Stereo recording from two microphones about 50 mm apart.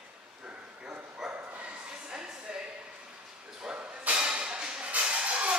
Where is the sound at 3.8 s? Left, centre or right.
Right.